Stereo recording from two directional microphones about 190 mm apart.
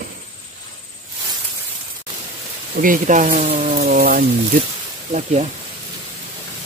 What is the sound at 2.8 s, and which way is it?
Speech, 45° right (ahead or behind).